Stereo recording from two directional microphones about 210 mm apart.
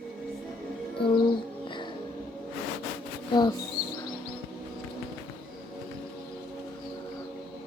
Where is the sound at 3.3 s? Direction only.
20° left (ahead or behind).